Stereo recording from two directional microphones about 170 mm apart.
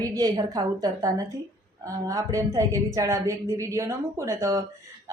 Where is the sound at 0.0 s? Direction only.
20° right (ahead or behind).